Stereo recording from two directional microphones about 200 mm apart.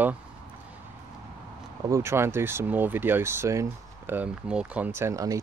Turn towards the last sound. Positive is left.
turn(degrees=-15)  # may be behind; listen again after turning